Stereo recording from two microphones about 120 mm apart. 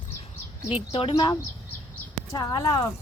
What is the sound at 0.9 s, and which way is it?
Speech, 45° left (ahead or behind).